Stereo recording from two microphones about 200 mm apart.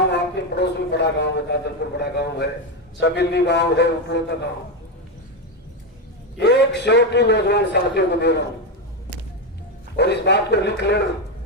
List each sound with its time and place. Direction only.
0.1 s a sound: 55° left (ahead or behind)
2.0 s a man's voice: 55° left (ahead or behind)
6.3 s a man's voice: 60° left (ahead or behind)
10.0 s a man's voice: 55° left (ahead or behind)